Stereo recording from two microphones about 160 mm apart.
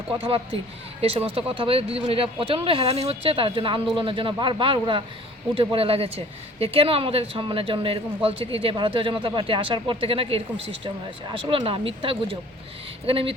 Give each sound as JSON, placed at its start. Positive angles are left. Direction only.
{"t": 0.2, "sound": "speech", "side_deg": -35}